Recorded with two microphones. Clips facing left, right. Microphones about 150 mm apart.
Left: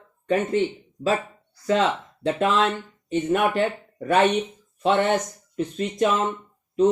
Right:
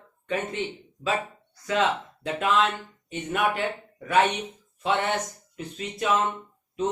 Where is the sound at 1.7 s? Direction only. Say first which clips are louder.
Left 3 dB; 35° left (ahead or behind).